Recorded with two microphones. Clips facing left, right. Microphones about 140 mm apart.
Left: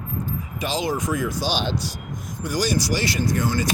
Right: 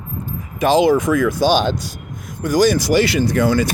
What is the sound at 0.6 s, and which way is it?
Speech, 55° right (ahead or behind).